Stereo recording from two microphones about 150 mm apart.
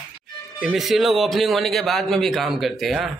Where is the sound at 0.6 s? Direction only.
5° right (ahead or behind).